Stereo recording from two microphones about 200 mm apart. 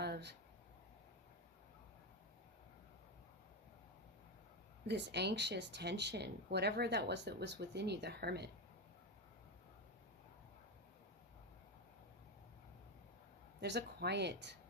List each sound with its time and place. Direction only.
0.0 s a sound: 55° right (ahead or behind)
4.9 s speech: 55° right (ahead or behind)
13.6 s speech: 55° right (ahead or behind)